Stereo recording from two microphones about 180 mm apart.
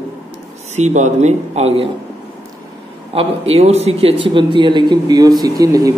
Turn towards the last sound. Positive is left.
turn(degrees=-20)  # may be behind; listen again after turning